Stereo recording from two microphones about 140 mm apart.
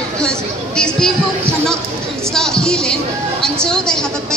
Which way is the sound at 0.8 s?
5° left (ahead or behind).